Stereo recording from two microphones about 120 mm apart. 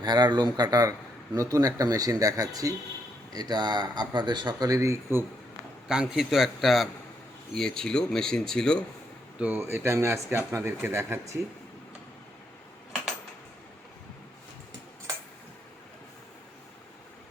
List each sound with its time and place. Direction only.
0.0 s speech: 35° right (ahead or behind)
5.9 s speech: 5° right (ahead or behind)
9.4 s speech: 15° right (ahead or behind)